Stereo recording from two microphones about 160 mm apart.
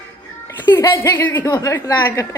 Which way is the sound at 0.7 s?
15° left (ahead or behind).